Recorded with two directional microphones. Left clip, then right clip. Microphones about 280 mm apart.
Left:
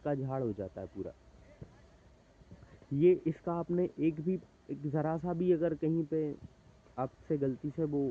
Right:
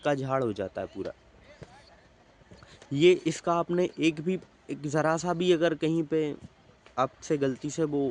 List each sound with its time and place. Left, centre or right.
0.0 s speech: centre
2.9 s speech: centre